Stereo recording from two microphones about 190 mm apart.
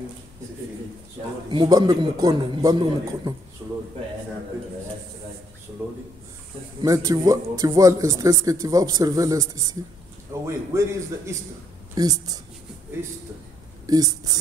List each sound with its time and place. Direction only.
1.5 s a man's voice: 20° right (ahead or behind)
3.6 s a man's voice: 10° right (ahead or behind)
6.8 s a man's voice: 20° right (ahead or behind)
13.8 s a man's voice: 20° right (ahead or behind)